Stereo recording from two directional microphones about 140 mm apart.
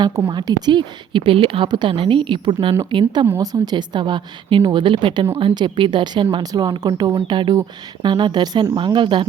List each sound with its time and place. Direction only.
0.3 s a woman's voice: 30° right (ahead or behind)
3.2 s a woman's voice: 25° right (ahead or behind)